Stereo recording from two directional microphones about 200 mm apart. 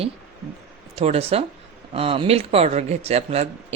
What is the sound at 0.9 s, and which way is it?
Speech, 30° right (ahead or behind).